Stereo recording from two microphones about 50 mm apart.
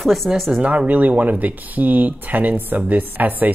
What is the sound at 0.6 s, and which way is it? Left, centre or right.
Speech, right.